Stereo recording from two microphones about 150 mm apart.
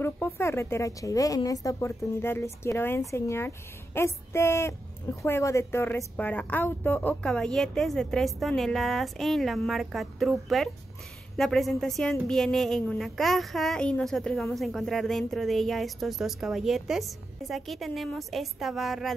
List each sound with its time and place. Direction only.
0.0 s a woman's voice: 15° left (ahead or behind); by 19.1 s centre (ahead or behind)